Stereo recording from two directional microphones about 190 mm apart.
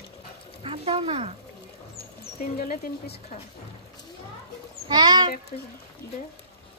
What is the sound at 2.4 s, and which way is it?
Speech, 50° left (ahead or behind).